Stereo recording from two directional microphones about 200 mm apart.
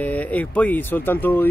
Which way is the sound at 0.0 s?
10° left (ahead or behind).